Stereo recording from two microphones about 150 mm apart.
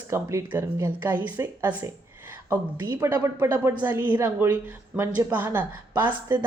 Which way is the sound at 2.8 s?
25° right (ahead or behind).